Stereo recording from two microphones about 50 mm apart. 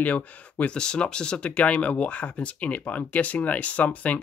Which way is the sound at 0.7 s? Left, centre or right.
Centre.